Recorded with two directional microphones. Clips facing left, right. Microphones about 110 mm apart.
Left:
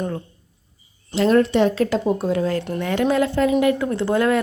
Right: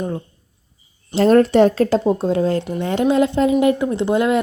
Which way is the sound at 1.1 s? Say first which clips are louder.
Right 4 dB; 40° right (ahead or behind).